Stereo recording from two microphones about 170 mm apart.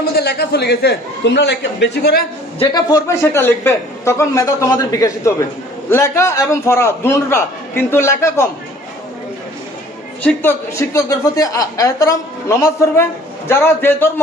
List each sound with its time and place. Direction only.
0.2 s a man's voice: 70° left (ahead or behind)
2.7 s a man's voice: 20° left (ahead or behind)
10.2 s a man's voice: 15° left (ahead or behind)